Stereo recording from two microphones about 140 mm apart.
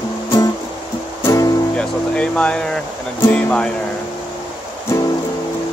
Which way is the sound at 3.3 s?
10° left (ahead or behind).